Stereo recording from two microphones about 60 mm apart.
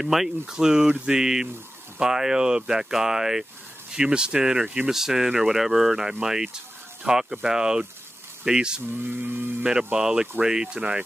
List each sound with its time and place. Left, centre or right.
0.0 s speech: centre
8.9 s a sound: right
9.9 s speech: centre